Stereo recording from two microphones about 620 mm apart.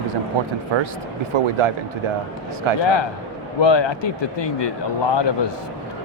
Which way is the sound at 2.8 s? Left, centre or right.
Left.